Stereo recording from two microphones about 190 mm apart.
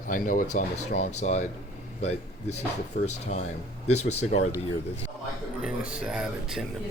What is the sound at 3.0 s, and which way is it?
Speech, 55° left (ahead or behind).